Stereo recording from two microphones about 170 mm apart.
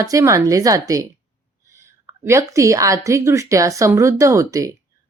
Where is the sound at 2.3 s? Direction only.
20° right (ahead or behind).